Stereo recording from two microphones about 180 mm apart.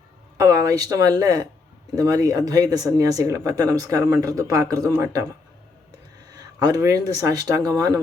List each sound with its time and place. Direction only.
0.3 s speech: 20° right (ahead or behind)
6.3 s speech: 20° right (ahead or behind)